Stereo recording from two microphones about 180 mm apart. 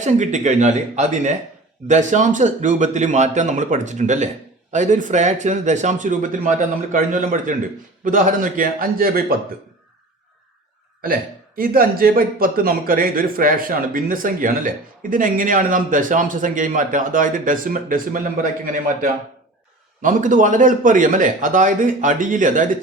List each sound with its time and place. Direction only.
0.0 s a man's voice: 40° right (ahead or behind)
11.0 s a man's voice: 55° right (ahead or behind)